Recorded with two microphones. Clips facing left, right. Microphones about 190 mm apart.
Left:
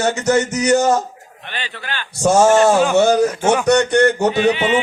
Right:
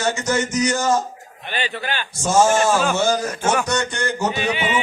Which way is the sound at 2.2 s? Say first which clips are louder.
Left 5 dB; 65° left (ahead or behind).